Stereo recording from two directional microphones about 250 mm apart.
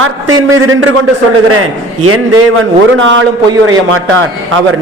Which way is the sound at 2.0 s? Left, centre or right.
Right.